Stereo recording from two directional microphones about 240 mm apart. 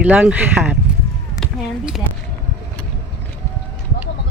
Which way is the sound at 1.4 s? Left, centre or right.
Centre.